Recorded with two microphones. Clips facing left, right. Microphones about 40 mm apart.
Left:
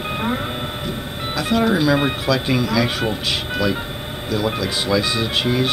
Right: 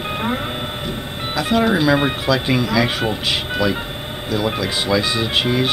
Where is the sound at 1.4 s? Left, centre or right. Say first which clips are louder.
Right 1 dB; centre.